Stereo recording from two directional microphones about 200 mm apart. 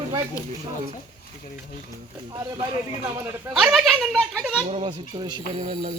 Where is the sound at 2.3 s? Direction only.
15° right (ahead or behind).